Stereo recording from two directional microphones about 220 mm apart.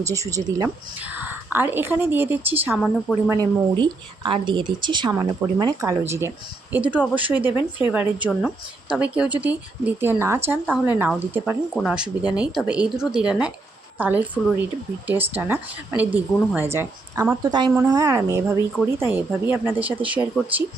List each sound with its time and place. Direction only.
0.0 s speech: 15° right (ahead or behind)
3.2 s a woman's voice: 20° right (ahead or behind)